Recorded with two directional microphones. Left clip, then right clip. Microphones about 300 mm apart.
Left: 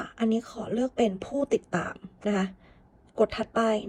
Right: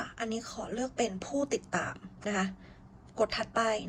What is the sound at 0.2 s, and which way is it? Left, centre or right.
Speech, centre.